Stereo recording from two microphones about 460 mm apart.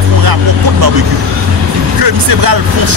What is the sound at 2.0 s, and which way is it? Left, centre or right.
Music, right.